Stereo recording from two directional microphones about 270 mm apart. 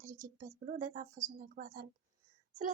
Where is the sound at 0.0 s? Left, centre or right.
Right.